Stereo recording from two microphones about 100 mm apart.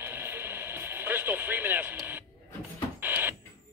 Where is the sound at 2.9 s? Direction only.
20° right (ahead or behind).